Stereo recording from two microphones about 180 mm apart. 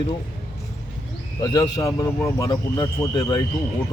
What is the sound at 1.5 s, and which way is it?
A man's voice, 20° left (ahead or behind).